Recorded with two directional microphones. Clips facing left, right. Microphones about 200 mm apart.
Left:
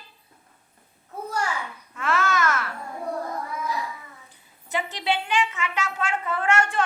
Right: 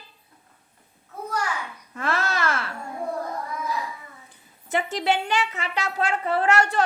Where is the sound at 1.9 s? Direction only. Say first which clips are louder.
Left 2 dB; 35° right (ahead or behind).